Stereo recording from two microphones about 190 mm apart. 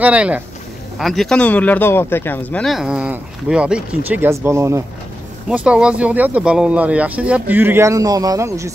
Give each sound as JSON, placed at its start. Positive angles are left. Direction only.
{"t": 0.0, "sound": "speech", "side_deg": -5}